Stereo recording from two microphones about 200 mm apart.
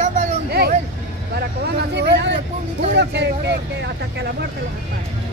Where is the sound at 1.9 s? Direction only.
60° right (ahead or behind).